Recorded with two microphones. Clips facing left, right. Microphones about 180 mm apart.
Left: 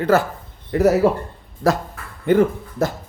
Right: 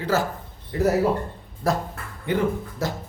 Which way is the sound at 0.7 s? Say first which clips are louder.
Left 6 dB; 75° left (ahead or behind).